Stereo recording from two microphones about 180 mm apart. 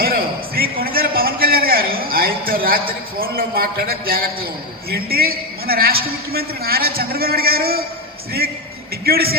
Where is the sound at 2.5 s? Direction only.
55° right (ahead or behind).